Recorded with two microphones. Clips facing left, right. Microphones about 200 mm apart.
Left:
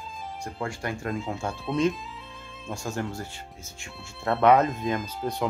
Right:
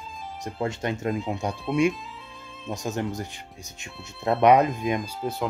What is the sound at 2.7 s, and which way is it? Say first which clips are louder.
Speech: right 3 dB; 20° right (ahead or behind).